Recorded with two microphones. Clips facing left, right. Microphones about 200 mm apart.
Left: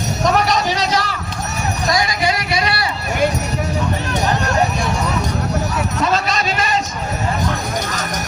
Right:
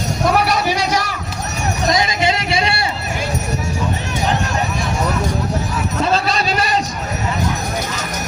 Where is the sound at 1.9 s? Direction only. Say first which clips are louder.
Right 1 dB; 20° right (ahead or behind).